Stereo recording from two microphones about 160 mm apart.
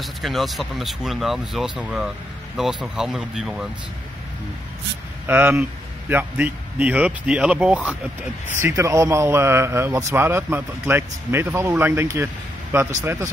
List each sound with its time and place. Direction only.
0.0 s speech: centre (ahead or behind)
5.2 s speech: 15° right (ahead or behind)
8.5 s speech: 15° right (ahead or behind)